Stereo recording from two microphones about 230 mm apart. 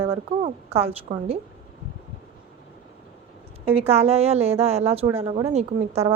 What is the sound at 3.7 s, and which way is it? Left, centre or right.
A woman's voice, right.